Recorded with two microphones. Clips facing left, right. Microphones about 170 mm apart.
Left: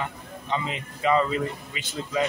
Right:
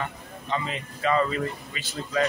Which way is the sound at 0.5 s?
20° left (ahead or behind).